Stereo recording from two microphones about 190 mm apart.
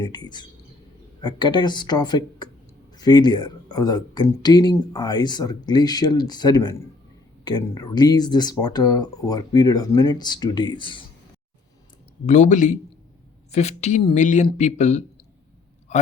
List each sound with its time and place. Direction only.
0.0 s speech: 20° left (ahead or behind)
12.2 s speech: 40° left (ahead or behind)